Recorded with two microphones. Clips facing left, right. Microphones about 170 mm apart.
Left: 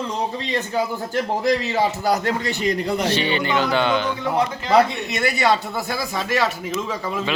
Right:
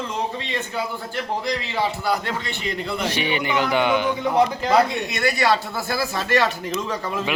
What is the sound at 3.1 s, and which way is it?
Speech, 15° right (ahead or behind).